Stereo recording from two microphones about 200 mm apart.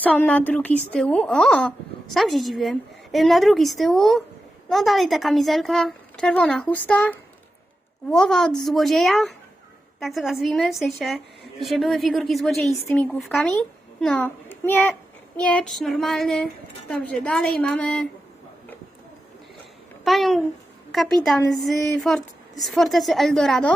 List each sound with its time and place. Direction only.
0.0 s a woman's voice: 5° left (ahead or behind)
20.1 s a woman's voice: centre (ahead or behind)